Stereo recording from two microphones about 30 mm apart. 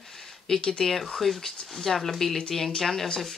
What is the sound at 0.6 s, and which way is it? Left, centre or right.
Speech, left.